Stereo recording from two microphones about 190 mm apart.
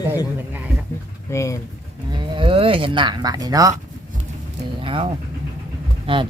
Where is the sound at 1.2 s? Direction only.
15° left (ahead or behind).